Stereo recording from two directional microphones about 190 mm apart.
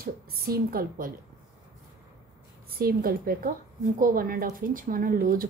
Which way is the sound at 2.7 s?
50° right (ahead or behind).